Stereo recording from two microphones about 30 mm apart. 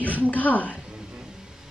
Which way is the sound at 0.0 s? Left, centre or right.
Left.